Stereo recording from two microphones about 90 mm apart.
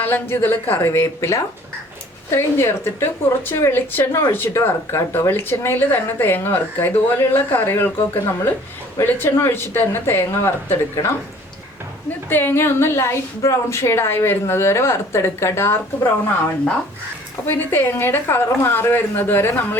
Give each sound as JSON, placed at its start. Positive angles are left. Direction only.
{"t": 0.0, "sound": "a woman's voice", "side_deg": 25}
{"t": 12.3, "sound": "a woman's voice", "side_deg": 25}
{"t": 17.4, "sound": "a woman's voice", "side_deg": 25}